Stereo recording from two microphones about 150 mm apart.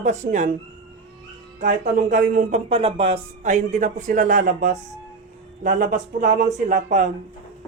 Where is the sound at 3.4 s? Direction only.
55° right (ahead or behind).